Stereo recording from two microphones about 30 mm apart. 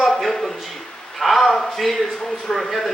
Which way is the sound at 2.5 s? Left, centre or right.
Left.